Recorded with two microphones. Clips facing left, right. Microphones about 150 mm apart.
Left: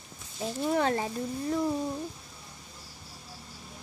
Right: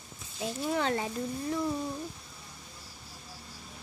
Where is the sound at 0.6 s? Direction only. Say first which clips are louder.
Left 3 dB; 45° left (ahead or behind).